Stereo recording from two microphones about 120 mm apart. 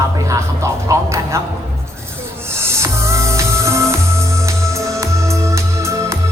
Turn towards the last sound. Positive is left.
turn(degrees=-25)  # may be behind; listen again after turning